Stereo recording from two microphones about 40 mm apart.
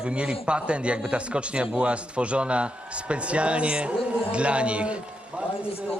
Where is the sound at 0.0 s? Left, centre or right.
Right.